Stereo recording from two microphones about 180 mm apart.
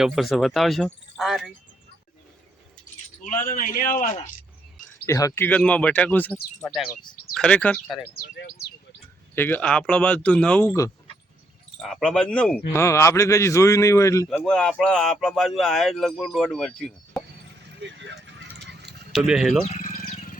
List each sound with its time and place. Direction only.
0.0 s speech: centre (ahead or behind)
3.2 s a man's voice: 45° left (ahead or behind)
5.0 s speech: 15° left (ahead or behind)
8.1 s speech: 60° left (ahead or behind)
9.3 s speech: 10° left (ahead or behind)
11.8 s speech: centre (ahead or behind); by 14.3 s 15° left (ahead or behind)
14.4 s speech: 5° left (ahead or behind)
17.7 s vehicle: 85° right
18.6 s clip-clop: 70° right (ahead or behind)
19.1 s speech: 5° right (ahead or behind)
19.6 s a sound: 45° left (ahead or behind)